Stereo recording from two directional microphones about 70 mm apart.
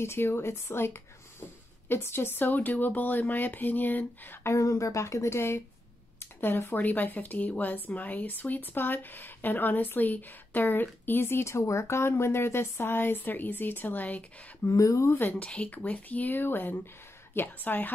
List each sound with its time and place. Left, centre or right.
0.0 s speech: left
14.7 s speech: left
15.1 s speech: left